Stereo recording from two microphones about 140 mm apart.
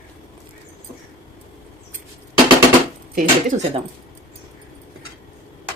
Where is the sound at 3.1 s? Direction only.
60° right (ahead or behind).